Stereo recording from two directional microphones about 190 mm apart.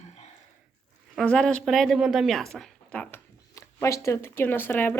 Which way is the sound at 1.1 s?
5° left (ahead or behind).